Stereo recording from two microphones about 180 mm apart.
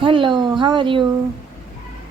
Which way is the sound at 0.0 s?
25° right (ahead or behind).